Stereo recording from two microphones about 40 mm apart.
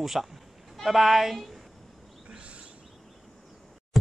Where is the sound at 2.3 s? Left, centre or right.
Right.